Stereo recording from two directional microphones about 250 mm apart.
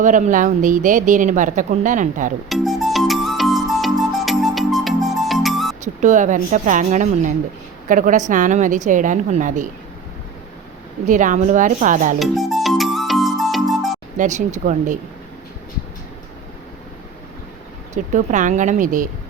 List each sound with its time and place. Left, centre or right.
0.0 s speech: right
2.5 s music: centre
5.8 s speech: right
11.0 s speech: right
12.2 s music: centre
14.2 s speech: right
17.9 s speech: right